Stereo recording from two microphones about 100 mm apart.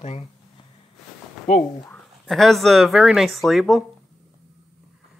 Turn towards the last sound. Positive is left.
turn(degrees=0)  # may be behind; listen again after turning